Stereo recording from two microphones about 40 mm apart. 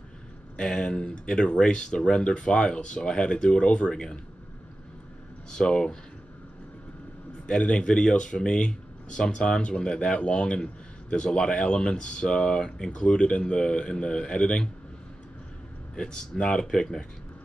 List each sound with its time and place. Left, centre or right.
0.6 s speech: left
5.5 s speech: left
7.4 s speech: left
15.9 s speech: centre